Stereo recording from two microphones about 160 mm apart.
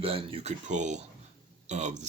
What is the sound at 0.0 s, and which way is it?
Speech, 35° right (ahead or behind).